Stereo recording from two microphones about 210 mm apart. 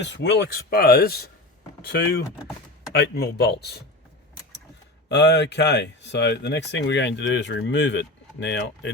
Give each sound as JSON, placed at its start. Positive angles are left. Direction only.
{"t": 0.0, "sound": "speech", "side_deg": 55}
{"t": 5.0, "sound": "speech", "side_deg": 55}